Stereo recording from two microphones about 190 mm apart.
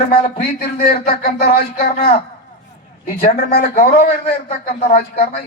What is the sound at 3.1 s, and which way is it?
A man's voice, 50° left (ahead or behind).